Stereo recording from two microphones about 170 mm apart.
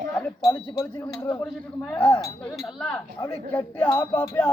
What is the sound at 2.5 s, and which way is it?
Speech, centre (ahead or behind).